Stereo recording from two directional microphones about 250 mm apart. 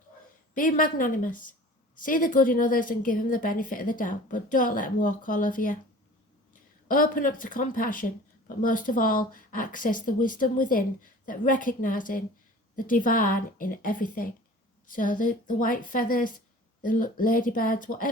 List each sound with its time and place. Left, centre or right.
0.5 s a woman's voice: left